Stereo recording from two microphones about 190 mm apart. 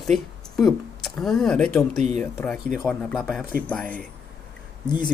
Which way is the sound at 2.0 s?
35° right (ahead or behind).